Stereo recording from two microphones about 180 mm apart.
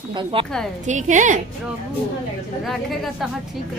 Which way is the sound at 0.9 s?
45° right (ahead or behind).